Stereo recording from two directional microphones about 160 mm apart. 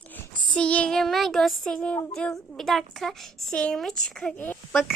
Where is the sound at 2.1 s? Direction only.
5° left (ahead or behind).